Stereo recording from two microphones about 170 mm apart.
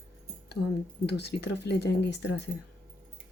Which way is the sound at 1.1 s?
80° left.